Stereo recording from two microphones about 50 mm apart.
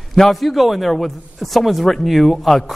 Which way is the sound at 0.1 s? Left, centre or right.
Centre.